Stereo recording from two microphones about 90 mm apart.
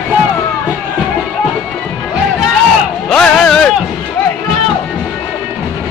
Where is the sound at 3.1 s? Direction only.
10° left (ahead or behind).